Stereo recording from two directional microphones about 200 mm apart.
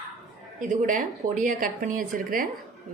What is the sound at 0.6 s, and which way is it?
Speech, 40° right (ahead or behind).